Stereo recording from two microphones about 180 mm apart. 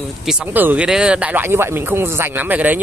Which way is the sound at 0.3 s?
10° right (ahead or behind).